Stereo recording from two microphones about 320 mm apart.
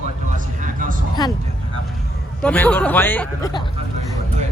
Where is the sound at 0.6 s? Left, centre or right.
Right.